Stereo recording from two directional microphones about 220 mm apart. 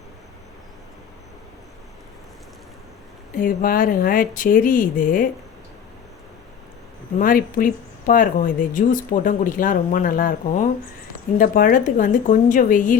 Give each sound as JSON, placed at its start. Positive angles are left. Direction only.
{"t": 3.3, "sound": "speech", "side_deg": 40}
{"t": 7.2, "sound": "speech", "side_deg": 40}